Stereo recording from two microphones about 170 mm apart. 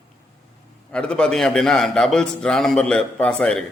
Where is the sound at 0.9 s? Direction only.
5° left (ahead or behind).